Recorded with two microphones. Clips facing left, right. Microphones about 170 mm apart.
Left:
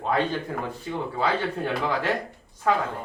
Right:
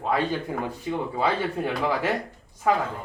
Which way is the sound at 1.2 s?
10° right (ahead or behind).